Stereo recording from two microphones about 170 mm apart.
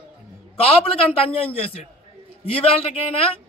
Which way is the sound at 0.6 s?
35° left (ahead or behind).